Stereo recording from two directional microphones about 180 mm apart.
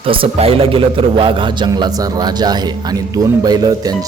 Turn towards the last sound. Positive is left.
turn(degrees=-20)  # may be behind; listen again after turning